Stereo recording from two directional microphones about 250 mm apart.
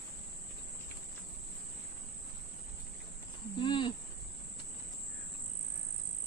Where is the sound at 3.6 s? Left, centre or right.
Centre.